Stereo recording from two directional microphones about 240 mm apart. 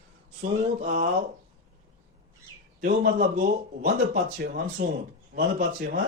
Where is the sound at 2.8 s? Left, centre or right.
Right.